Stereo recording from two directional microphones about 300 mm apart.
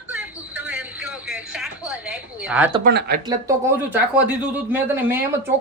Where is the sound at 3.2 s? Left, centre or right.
Centre.